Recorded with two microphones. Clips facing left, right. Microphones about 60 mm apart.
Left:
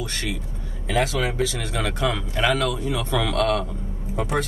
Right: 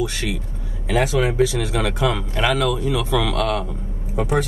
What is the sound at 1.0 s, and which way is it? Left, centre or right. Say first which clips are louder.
Speech: right 5 dB; centre.